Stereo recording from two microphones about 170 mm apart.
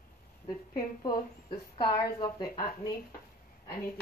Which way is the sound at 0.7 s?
25° left (ahead or behind).